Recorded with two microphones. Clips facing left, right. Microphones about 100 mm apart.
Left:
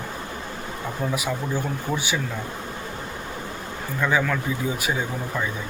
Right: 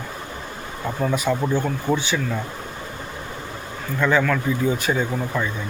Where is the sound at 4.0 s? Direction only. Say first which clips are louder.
Right 4 dB; 10° left (ahead or behind).